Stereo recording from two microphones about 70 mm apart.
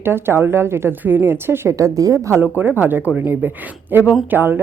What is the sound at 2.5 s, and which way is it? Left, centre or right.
A woman's voice, right.